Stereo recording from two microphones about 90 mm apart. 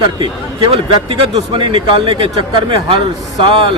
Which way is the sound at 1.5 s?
65° right (ahead or behind).